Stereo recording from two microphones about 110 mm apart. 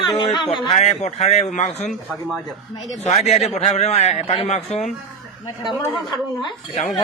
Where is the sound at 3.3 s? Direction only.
90° left.